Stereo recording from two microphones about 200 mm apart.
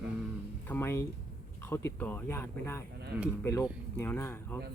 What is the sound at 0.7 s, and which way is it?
Music, 10° left (ahead or behind).